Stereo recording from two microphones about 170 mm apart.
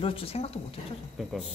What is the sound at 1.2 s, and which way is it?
Speech, centre (ahead or behind).